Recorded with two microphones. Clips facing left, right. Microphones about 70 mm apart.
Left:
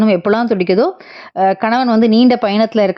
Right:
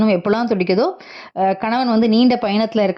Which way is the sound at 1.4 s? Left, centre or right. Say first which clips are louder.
Left 4 dB; left.